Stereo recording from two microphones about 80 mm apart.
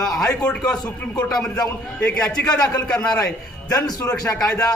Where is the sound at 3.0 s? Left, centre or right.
Left.